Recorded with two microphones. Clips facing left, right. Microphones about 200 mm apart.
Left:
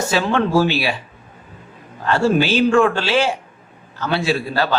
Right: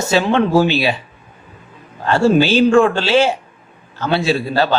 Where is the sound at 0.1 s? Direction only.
20° right (ahead or behind).